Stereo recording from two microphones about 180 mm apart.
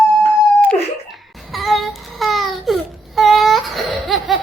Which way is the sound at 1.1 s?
Centre (ahead or behind).